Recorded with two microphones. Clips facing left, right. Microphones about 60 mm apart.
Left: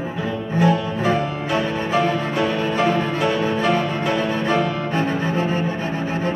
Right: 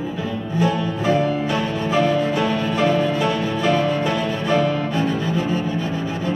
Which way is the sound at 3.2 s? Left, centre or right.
Left.